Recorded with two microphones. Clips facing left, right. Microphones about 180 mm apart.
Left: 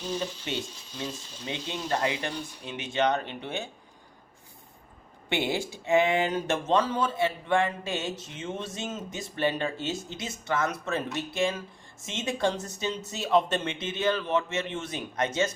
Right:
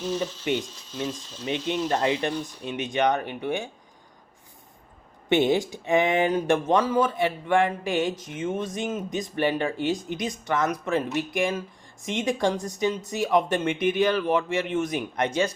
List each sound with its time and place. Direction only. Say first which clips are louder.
0.4 s speech: right 7 dB; 15° right (ahead or behind)
5.3 s speech: right 8 dB; 20° right (ahead or behind)